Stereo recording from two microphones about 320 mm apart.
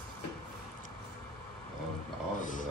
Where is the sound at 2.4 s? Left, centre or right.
Left.